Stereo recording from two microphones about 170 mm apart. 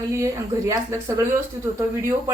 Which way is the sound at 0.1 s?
20° right (ahead or behind).